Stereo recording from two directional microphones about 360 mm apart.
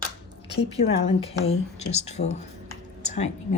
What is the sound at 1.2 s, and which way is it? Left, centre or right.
Speech, centre.